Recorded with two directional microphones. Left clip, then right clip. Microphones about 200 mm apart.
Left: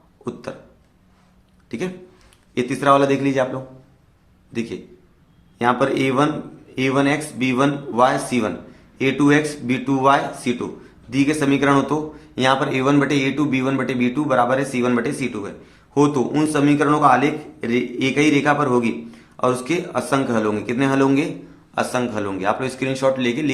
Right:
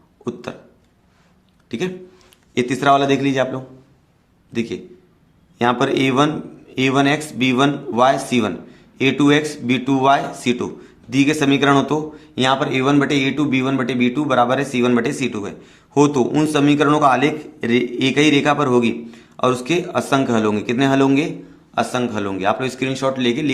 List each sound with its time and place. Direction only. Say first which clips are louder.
1.7 s a man's voice: right 3 dB; 30° right (ahead or behind)